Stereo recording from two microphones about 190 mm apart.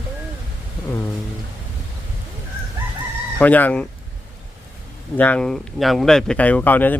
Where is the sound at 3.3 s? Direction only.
10° left (ahead or behind).